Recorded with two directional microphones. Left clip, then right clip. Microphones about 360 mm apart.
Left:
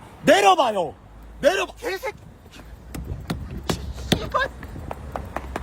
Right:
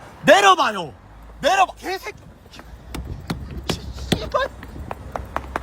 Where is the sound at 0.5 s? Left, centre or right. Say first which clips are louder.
Even; right.